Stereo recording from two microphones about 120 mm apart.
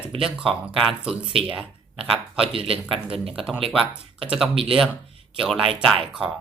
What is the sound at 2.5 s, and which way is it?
Speech, 50° right (ahead or behind).